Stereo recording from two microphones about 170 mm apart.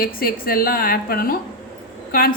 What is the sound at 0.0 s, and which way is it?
A woman's voice, 60° left (ahead or behind).